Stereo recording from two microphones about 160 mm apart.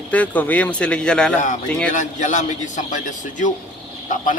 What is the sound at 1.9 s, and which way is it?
A man's voice, 50° left (ahead or behind).